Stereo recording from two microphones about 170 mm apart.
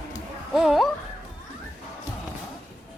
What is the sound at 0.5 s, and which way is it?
Speech, centre (ahead or behind).